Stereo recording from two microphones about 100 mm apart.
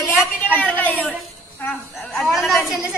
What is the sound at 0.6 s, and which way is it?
Speech, 15° left (ahead or behind).